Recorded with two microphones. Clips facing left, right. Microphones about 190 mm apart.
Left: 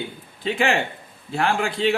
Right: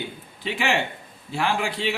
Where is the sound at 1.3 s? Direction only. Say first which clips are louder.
Left 2 dB; 50° left (ahead or behind).